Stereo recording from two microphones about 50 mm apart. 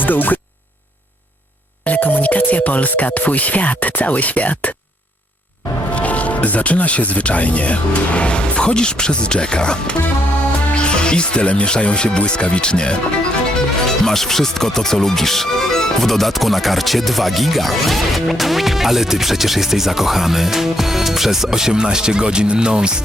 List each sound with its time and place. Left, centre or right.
0.0 s speech: left
1.8 s speech: left
5.9 s speech: left; by 22.9 s centre